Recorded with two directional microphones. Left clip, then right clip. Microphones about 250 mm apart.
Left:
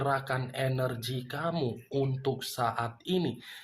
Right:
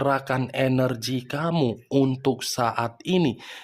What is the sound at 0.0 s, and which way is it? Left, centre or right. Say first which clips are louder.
Speech: right 7 dB; right.